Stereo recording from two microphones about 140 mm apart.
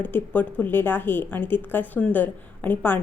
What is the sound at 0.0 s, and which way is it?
A woman's voice, 10° left (ahead or behind).